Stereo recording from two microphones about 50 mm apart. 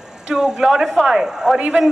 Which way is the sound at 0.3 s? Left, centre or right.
Centre.